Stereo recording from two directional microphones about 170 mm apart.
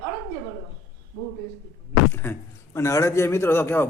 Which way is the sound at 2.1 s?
15° left (ahead or behind).